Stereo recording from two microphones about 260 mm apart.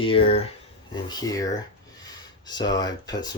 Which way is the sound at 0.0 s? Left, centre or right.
Left.